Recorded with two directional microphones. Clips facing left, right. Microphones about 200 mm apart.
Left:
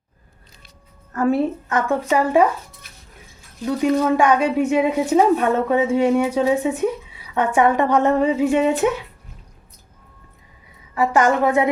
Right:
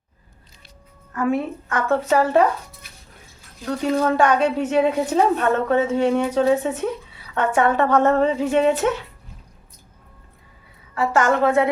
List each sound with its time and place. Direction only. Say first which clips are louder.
1.1 s a woman's voice: left 3 dB; 35° left (ahead or behind)
1.7 s a woman's voice: right 2 dB; 15° left (ahead or behind)
4.0 s a woman's voice: left 1 dB; 10° left (ahead or behind)
10.9 s a woman's voice: left 2 dB; 20° left (ahead or behind)